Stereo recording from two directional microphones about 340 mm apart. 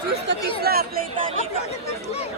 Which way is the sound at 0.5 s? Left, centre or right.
Right.